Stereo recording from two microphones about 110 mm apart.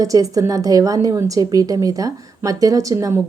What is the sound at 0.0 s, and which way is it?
A woman's voice, 30° right (ahead or behind).